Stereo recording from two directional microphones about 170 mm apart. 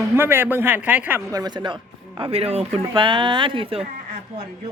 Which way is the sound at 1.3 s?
25° right (ahead or behind).